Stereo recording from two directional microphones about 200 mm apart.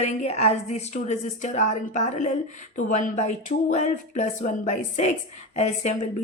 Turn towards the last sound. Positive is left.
turn(degrees=35)  # may be behind; listen again after turning